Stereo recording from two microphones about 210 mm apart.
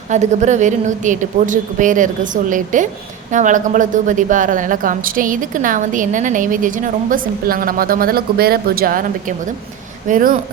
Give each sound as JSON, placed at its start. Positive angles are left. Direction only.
{"t": 0.1, "sound": "speech", "side_deg": -35}